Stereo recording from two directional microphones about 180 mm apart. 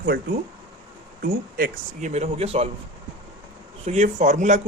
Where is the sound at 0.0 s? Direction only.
55° right (ahead or behind); by 2.6 s 35° right (ahead or behind).